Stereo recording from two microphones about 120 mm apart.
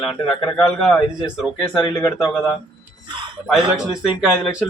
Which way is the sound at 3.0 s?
40° right (ahead or behind).